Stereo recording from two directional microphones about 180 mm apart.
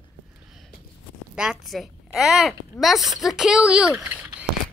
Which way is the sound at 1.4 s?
Centre (ahead or behind).